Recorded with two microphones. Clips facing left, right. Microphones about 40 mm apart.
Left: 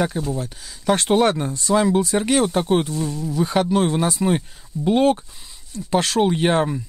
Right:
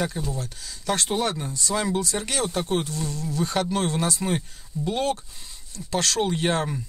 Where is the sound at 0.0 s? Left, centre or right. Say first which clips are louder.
Left 6 dB; left.